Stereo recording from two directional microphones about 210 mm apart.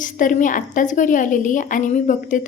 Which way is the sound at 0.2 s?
40° left (ahead or behind).